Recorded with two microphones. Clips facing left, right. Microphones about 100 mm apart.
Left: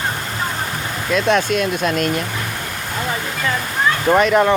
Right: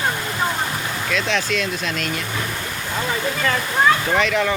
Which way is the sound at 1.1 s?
45° left (ahead or behind).